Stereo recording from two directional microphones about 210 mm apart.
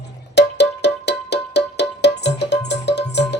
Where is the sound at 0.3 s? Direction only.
55° left (ahead or behind).